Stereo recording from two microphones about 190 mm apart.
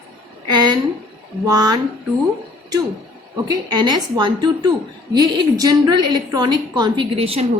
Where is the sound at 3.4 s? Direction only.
20° right (ahead or behind).